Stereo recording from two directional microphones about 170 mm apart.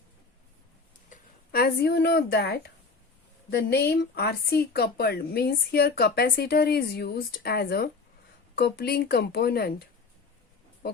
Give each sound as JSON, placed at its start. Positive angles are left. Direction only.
{"t": 1.1, "sound": "speech", "side_deg": 65}